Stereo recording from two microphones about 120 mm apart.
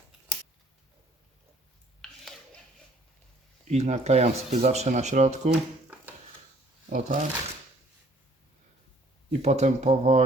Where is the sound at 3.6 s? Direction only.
70° right (ahead or behind).